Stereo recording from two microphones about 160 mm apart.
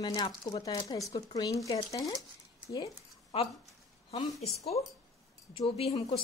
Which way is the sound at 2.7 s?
20° left (ahead or behind).